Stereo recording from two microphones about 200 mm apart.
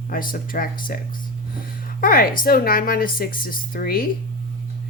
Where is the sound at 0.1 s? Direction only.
45° left (ahead or behind).